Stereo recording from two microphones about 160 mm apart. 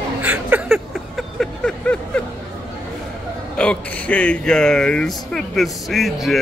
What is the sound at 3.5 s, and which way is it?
Speech, 5° left (ahead or behind).